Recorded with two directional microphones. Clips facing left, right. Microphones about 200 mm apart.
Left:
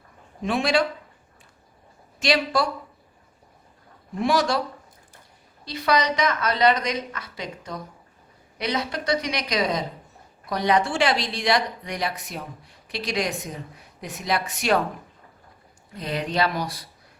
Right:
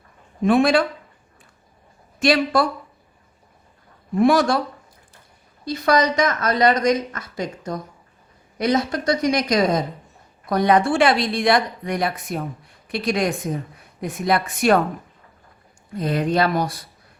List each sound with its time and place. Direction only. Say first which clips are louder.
0.4 s speech: right 6 dB; 55° right (ahead or behind)
2.1 s speech: right 5 dB; 55° right (ahead or behind)
4.2 s speech: right 6 dB; 55° right (ahead or behind)
5.6 s speech: right 4 dB; 45° right (ahead or behind)
16.0 s speech: right 5 dB; 50° right (ahead or behind)